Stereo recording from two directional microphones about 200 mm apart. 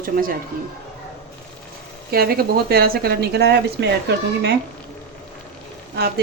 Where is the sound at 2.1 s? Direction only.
50° right (ahead or behind).